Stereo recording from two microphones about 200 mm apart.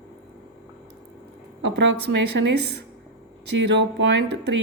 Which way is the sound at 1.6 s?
65° right (ahead or behind).